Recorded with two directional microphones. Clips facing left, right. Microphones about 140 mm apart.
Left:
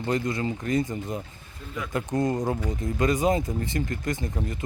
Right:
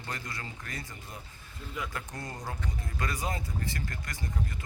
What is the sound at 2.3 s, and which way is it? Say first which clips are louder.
Speech: left 14 dB; 45° left (ahead or behind).